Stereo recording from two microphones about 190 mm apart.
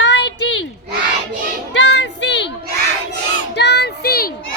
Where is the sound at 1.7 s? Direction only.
65° left (ahead or behind).